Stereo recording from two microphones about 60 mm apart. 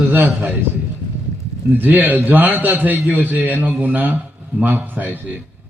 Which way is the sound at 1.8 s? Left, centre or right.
Right.